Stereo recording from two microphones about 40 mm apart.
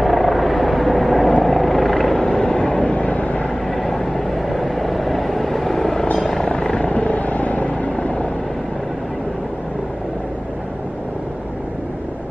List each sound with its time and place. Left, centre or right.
0.0 s vehicle: centre
2.1 s vehicle: centre; by 3.4 s left
3.6 s vehicle: centre
6.1 s helicopter: centre
6.4 s helicopter: left
6.9 s vehicle: left